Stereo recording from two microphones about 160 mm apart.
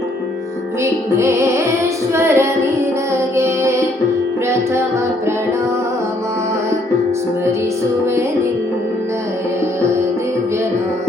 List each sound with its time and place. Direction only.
0.9 s music: 15° right (ahead or behind)